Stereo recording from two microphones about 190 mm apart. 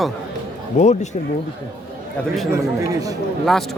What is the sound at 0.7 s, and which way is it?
Speech, 40° left (ahead or behind).